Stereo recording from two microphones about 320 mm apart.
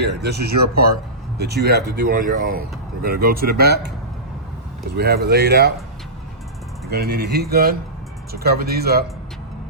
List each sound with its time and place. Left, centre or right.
0.0 s speech: right
4.9 s speech: right
6.9 s speech: right